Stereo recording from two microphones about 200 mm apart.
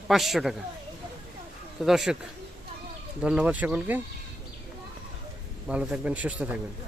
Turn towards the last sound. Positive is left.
turn(degrees=-5)  # may be behind; listen again after turning